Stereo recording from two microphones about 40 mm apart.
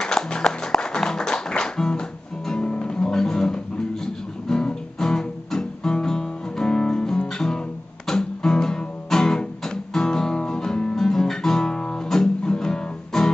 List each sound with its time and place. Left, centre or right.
0.0 s music: centre
4.9 s guitar: centre
6.0 s music: centre
9.9 s guitar: centre
12.1 s music: centre